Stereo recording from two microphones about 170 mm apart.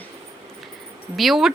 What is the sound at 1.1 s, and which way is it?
Speech, centre (ahead or behind).